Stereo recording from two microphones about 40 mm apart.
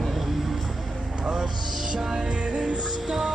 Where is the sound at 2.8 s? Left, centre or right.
Centre.